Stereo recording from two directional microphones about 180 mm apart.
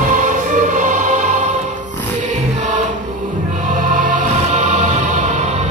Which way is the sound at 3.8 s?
45° right (ahead or behind).